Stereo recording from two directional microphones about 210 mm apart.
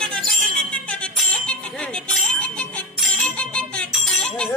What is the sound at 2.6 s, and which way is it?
Music, centre (ahead or behind).